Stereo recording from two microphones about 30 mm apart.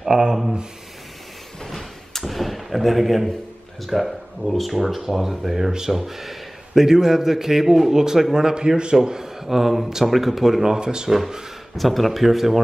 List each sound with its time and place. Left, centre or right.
0.3 s a man's voice: centre
1.7 s a sound: centre
3.8 s a man's voice: centre
8.5 s a man's voice: right; by 10.8 s centre
10.8 s a man's voice: right
11.1 s a man's voice: centre
11.7 s speech: centre